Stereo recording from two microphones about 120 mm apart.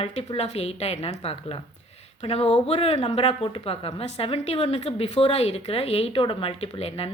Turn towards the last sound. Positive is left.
turn(degrees=55)  # may be behind; listen again after turning